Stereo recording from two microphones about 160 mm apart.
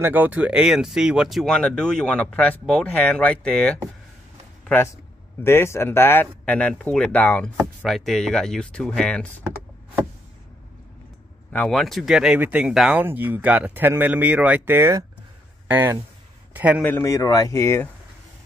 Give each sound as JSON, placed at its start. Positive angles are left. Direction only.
{"t": 0.0, "sound": "speech", "side_deg": -10}
{"t": 11.5, "sound": "a man's voice", "side_deg": 5}
{"t": 16.8, "sound": "speech", "side_deg": 15}